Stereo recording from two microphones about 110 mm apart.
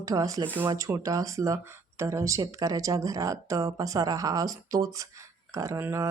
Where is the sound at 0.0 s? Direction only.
30° right (ahead or behind).